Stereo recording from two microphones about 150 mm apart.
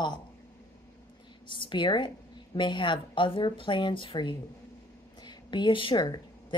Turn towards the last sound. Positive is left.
turn(degrees=30)  # may be behind; listen again after turning